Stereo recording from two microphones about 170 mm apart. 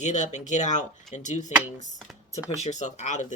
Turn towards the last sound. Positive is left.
turn(degrees=45)  # may be behind; listen again after turning